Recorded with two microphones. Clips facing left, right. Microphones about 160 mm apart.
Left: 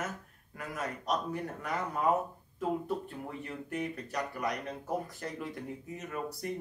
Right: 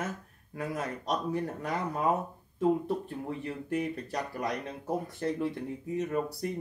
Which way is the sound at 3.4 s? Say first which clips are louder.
Right 4 dB; 30° right (ahead or behind).